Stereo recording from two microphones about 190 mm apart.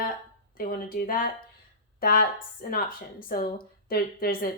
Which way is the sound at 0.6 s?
50° left (ahead or behind).